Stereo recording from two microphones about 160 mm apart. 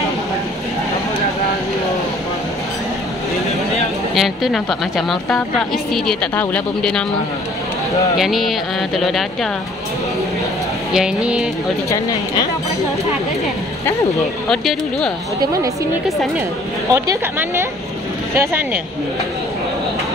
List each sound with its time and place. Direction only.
4.1 s speech: centre (ahead or behind)
8.2 s speech: centre (ahead or behind)
10.9 s speech: 5° right (ahead or behind)
14.5 s speech: centre (ahead or behind)
16.9 s speech: 15° right (ahead or behind)